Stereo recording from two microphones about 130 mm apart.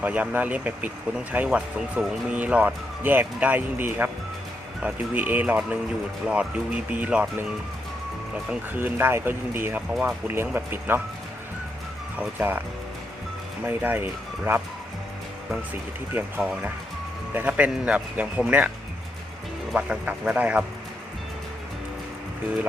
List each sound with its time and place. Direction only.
0.0 s speech: 10° right (ahead or behind)
8.4 s speech: 15° right (ahead or behind)
9.9 s speech: centre (ahead or behind)
10.2 s speech: 15° right (ahead or behind)
12.4 s speech: 15° right (ahead or behind)
13.7 s speech: 15° right (ahead or behind)
15.7 s speech: 10° right (ahead or behind)
19.7 s speech: 10° right (ahead or behind)